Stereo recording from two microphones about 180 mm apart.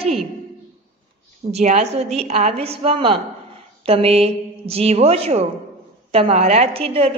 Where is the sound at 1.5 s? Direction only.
40° right (ahead or behind).